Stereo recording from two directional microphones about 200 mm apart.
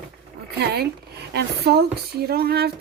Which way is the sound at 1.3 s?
50° right (ahead or behind).